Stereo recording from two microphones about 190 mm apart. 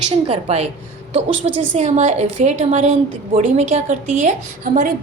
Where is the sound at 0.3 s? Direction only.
35° right (ahead or behind).